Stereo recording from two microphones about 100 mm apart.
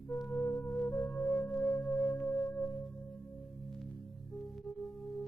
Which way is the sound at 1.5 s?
15° left (ahead or behind).